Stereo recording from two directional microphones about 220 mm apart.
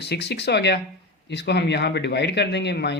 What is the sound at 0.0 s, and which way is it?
Speech, 50° left (ahead or behind).